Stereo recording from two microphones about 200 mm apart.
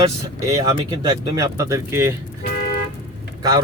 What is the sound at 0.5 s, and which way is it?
Speech, 20° right (ahead or behind).